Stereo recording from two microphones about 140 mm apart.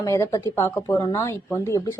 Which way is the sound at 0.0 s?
20° left (ahead or behind).